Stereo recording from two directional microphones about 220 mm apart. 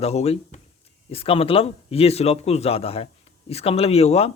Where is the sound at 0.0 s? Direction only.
30° left (ahead or behind).